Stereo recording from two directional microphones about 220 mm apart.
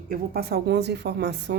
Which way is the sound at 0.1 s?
45° right (ahead or behind).